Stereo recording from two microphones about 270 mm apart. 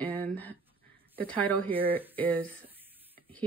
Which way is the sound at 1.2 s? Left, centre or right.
Centre.